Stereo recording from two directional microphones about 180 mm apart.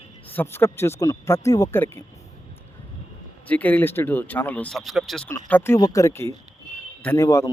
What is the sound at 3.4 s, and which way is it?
Speech, 10° left (ahead or behind).